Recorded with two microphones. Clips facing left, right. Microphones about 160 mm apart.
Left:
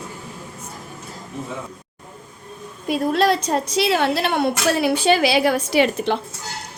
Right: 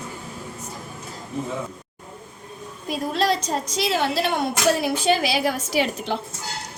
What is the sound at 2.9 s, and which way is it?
A woman's voice, 60° left (ahead or behind).